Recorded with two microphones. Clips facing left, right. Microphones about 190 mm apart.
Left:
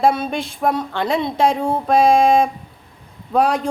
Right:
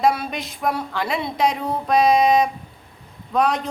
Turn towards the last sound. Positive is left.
turn(degrees=30)  # may be behind; listen again after turning